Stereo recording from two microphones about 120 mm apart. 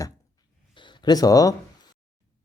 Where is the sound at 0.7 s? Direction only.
40° left (ahead or behind).